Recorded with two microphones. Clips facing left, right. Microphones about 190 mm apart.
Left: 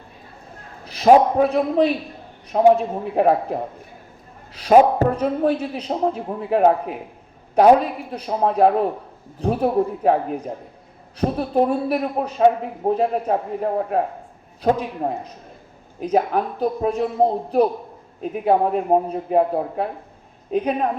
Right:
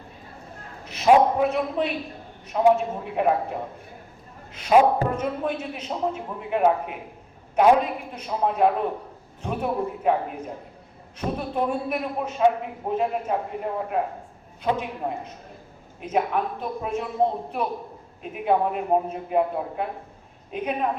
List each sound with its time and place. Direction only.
0.9 s a man's voice: 35° left (ahead or behind)
11.2 s a man's voice: 35° left (ahead or behind)
14.6 s a man's voice: 35° left (ahead or behind)